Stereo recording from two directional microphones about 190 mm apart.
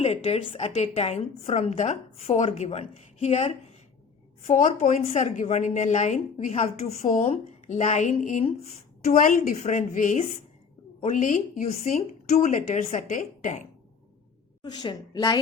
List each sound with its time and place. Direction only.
0.0 s a woman's voice: 35° left (ahead or behind)
14.6 s a woman's voice: 25° left (ahead or behind)